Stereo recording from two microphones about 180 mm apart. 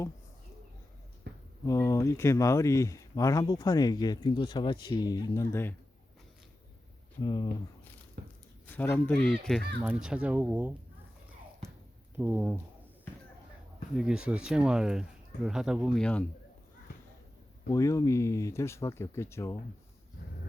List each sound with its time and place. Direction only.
1.6 s speech: 15° left (ahead or behind)
7.2 s speech: 25° left (ahead or behind)
8.2 s a sound: 65° right (ahead or behind)
8.7 s speech: 10° left (ahead or behind)
9.9 s speech: 5° right (ahead or behind)
12.1 s speech: 10° right (ahead or behind)
13.9 s speech: 5° right (ahead or behind)
17.7 s speech: 15° left (ahead or behind)